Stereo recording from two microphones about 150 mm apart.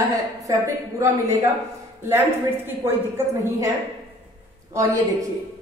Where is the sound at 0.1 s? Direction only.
20° right (ahead or behind).